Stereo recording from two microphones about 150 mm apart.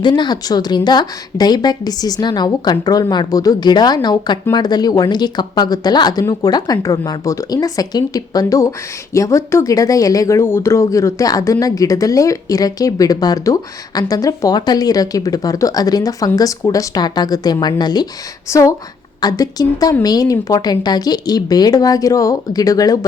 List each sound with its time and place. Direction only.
0.0 s a woman's voice: 30° left (ahead or behind)